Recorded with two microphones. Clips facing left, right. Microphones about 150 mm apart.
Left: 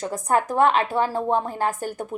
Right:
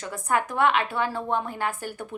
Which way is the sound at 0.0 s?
40° left (ahead or behind).